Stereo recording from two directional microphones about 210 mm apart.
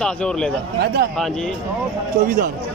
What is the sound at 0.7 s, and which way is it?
Speech, 50° right (ahead or behind).